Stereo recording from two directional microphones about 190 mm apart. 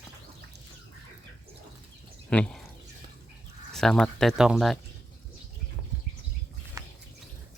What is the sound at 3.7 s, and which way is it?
Speech, centre (ahead or behind).